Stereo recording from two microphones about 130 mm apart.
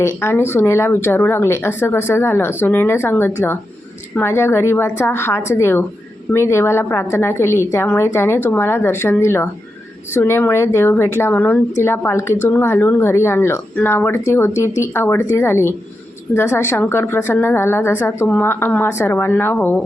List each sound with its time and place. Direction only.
0.0 s a woman's voice: 20° left (ahead or behind)